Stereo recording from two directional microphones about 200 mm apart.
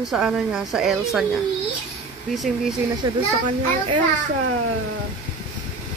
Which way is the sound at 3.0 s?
20° right (ahead or behind).